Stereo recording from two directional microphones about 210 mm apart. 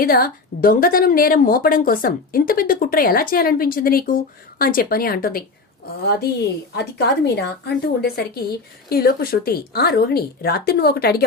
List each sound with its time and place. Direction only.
0.0 s a woman's voice: 45° left (ahead or behind)